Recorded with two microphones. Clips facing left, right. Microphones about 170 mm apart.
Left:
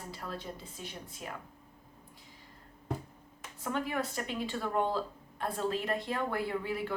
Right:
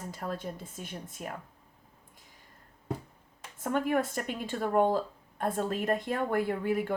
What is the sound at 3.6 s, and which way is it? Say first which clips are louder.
A woman's voice: right 6 dB; 50° right (ahead or behind).